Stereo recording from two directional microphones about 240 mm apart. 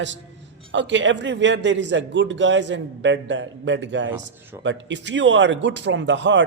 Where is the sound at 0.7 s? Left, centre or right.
Right.